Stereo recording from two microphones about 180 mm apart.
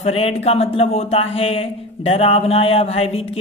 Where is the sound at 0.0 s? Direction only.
35° left (ahead or behind).